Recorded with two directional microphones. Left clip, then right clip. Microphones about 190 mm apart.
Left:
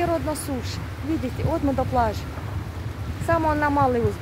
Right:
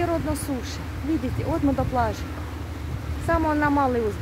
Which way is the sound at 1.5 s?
20° left (ahead or behind).